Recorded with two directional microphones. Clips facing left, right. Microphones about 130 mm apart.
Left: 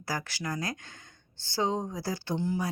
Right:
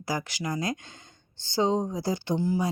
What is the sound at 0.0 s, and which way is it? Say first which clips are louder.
Speech: right 4 dB; 15° right (ahead or behind).